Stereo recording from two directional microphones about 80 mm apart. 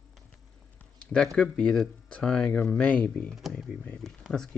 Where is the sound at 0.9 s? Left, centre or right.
Centre.